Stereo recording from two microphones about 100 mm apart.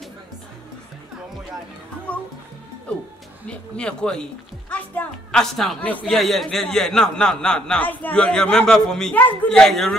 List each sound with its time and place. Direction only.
2.1 s a man's voice: 15° left (ahead or behind)
3.4 s a man's voice: 10° left (ahead or behind)
5.4 s speech: centre (ahead or behind)
5.8 s a man's voice: 15° left (ahead or behind)
6.0 s a man's voice: centre (ahead or behind)
9.1 s a man's voice: 15° left (ahead or behind)
9.5 s speech: 5° left (ahead or behind)